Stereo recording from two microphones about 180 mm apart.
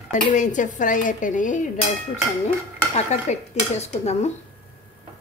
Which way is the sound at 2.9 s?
35° left (ahead or behind).